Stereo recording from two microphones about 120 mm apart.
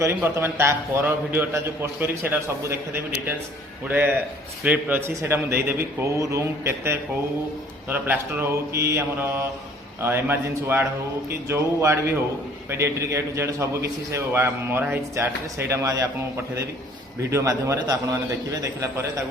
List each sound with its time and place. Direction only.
0.0 s a man's voice: 20° right (ahead or behind)
17.3 s a man's voice: 25° right (ahead or behind)